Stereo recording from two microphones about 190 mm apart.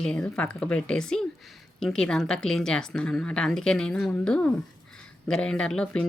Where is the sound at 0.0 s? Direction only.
5° left (ahead or behind).